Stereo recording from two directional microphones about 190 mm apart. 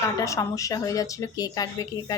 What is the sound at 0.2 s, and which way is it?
Speech, 15° left (ahead or behind).